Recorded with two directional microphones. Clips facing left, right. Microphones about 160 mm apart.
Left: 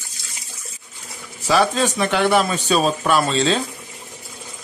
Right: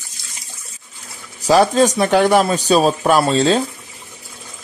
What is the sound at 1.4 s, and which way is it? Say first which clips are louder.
Speech: right 5 dB; 40° right (ahead or behind).